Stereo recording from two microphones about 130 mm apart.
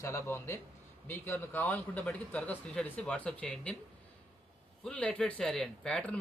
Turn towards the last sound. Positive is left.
turn(degrees=10)  # may be behind; listen again after turning